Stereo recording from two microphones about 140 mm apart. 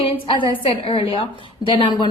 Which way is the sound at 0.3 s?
40° left (ahead or behind).